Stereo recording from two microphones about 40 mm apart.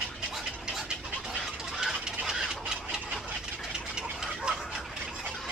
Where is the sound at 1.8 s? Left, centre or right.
Centre.